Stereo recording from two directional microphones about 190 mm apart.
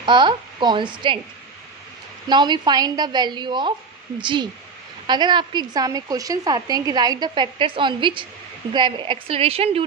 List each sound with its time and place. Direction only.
0.0 s a woman's voice: 25° right (ahead or behind)
2.2 s a woman's voice: 25° right (ahead or behind)